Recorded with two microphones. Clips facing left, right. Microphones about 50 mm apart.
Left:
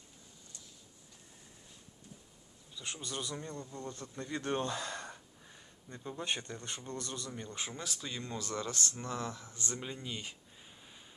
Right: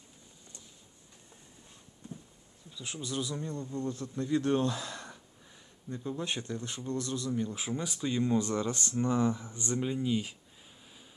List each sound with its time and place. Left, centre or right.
2.7 s speech: centre
9.7 s speech: centre
10.8 s a sound: centre